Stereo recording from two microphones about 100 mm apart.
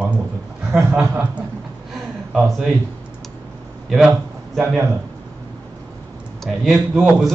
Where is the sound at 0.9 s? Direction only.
25° right (ahead or behind).